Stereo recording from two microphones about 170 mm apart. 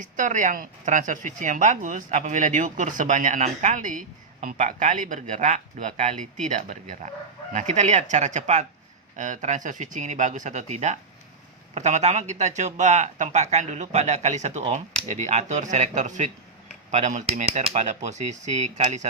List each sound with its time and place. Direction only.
0.0 s a woman's voice: 50° right (ahead or behind)